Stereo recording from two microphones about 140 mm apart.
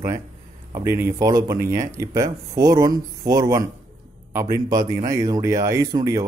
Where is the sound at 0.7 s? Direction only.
20° right (ahead or behind).